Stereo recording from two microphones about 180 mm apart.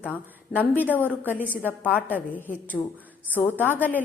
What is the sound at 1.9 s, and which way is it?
A woman's voice, 10° left (ahead or behind).